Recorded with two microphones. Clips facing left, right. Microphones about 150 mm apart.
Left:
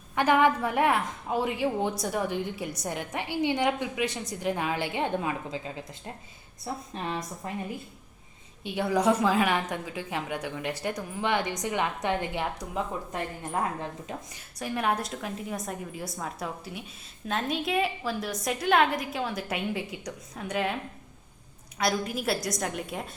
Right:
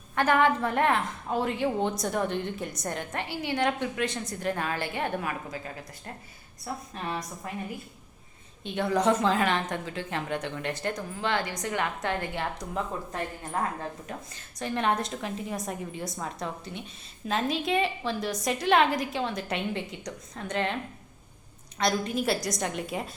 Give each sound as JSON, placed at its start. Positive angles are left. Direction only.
{"t": 0.2, "sound": "a woman's voice", "side_deg": 15}
{"t": 6.9, "sound": "a woman's voice", "side_deg": 25}
{"t": 8.6, "sound": "a woman's voice", "side_deg": 10}
{"t": 14.1, "sound": "a woman's voice", "side_deg": 10}
{"t": 21.8, "sound": "a woman's voice", "side_deg": 5}